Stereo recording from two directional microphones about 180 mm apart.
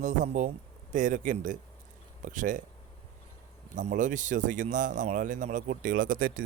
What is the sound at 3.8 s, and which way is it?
Speech, 45° right (ahead or behind).